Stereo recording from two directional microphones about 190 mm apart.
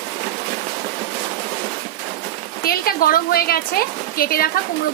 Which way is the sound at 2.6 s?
50° left (ahead or behind).